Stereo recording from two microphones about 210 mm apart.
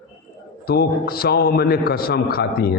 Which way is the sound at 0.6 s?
45° left (ahead or behind).